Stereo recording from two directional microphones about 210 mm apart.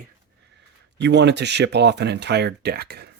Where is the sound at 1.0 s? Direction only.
55° right (ahead or behind).